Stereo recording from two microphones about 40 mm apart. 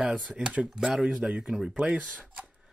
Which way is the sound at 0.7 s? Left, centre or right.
Centre.